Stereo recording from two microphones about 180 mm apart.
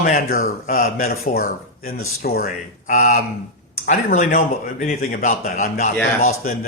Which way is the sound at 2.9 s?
45° left (ahead or behind).